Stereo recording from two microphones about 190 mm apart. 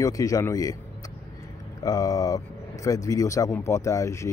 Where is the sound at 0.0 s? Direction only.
15° left (ahead or behind).